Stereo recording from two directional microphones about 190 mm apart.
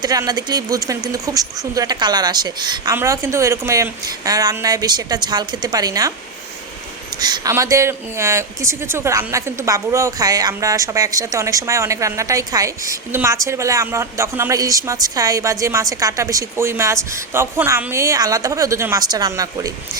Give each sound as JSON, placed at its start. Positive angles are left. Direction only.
{"t": 0.0, "sound": "speech", "side_deg": -20}
{"t": 7.2, "sound": "speech", "side_deg": -20}